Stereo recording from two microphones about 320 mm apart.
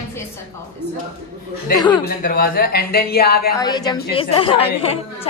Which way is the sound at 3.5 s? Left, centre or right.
Centre.